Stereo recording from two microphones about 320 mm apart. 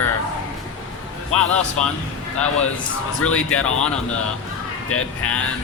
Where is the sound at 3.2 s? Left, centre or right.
Left.